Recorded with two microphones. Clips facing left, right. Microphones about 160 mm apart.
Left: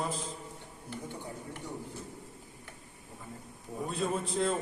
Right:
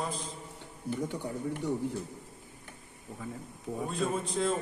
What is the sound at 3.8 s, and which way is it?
Mantra, centre (ahead or behind).